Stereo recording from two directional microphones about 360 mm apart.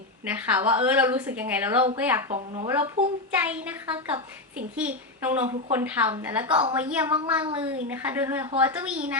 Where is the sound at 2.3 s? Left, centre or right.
Centre.